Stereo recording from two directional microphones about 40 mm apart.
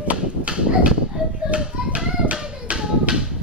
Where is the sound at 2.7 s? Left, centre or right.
Right.